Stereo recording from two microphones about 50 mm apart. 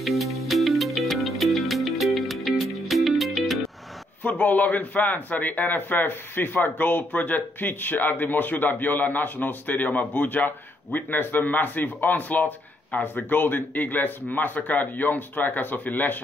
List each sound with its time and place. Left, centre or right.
0.0 s music: centre
4.2 s a man's voice: left